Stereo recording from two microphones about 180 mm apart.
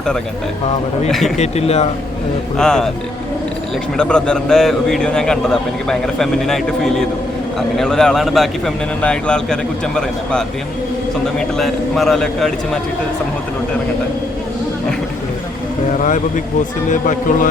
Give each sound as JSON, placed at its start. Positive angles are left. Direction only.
{"t": 1.4, "sound": "speech", "side_deg": 35}
{"t": 2.6, "sound": "a man's voice", "side_deg": 5}
{"t": 3.9, "sound": "a man's voice", "side_deg": 5}
{"t": 16.0, "sound": "speech", "side_deg": 45}